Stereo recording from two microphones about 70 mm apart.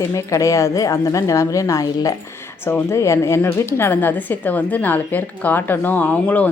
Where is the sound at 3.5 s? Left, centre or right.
Left.